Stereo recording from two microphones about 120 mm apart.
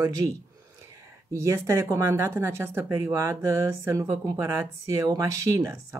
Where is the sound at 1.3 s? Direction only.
25° right (ahead or behind).